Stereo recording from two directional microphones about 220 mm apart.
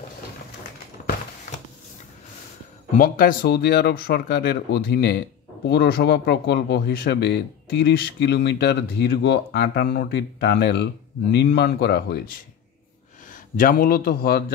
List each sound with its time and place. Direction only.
2.9 s speech: 40° left (ahead or behind)
13.3 s a man's voice: 40° left (ahead or behind)